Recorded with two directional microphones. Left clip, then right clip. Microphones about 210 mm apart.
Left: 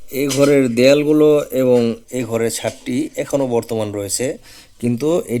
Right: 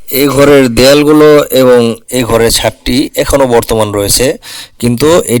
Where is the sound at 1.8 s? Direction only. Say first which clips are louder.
Right 9 dB; 30° right (ahead or behind).